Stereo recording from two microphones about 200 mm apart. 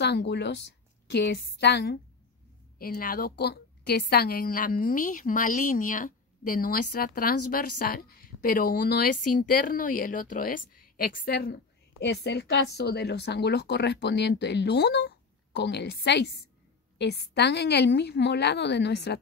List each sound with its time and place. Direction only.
0.0 s a woman's voice: 55° left (ahead or behind)